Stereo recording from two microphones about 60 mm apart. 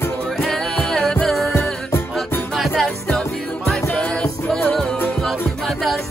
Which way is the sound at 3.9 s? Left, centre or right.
Centre.